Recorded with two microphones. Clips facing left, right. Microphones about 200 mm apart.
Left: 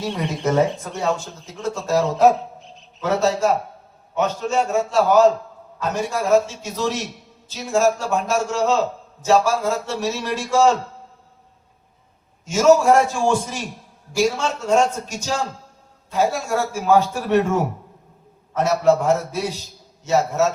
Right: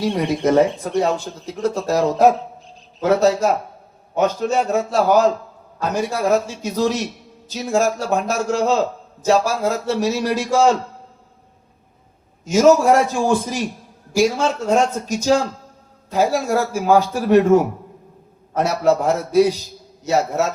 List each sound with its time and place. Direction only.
0.4 s a man's voice: 35° right (ahead or behind)
12.5 s a man's voice: 40° right (ahead or behind)
18.8 s a man's voice: 40° right (ahead or behind)